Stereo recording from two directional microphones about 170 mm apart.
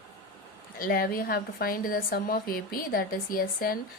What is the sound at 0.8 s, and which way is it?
A woman's voice, 60° left (ahead or behind).